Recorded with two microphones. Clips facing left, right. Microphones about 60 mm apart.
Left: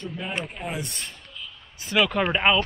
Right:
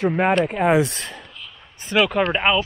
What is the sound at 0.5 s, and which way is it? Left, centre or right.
Speech, right.